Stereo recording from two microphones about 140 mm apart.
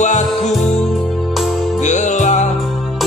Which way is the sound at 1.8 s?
60° left (ahead or behind).